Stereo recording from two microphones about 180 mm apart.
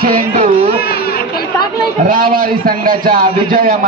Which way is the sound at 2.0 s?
50° right (ahead or behind).